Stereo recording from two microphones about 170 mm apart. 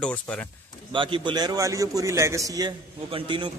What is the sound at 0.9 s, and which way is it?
A man's voice, 30° right (ahead or behind).